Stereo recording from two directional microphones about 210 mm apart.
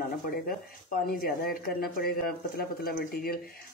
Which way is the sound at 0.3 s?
45° left (ahead or behind).